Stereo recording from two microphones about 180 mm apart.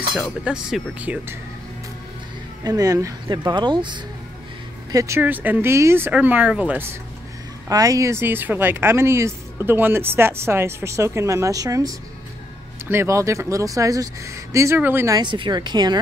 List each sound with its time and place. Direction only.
0.1 s cutlery: centre (ahead or behind)
2.6 s speech: 20° right (ahead or behind)